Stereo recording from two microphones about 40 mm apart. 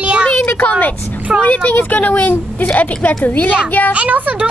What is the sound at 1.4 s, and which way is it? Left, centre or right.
Speech, left.